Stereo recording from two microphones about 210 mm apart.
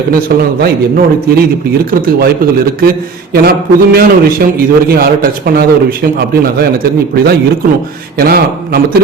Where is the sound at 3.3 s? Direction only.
45° right (ahead or behind).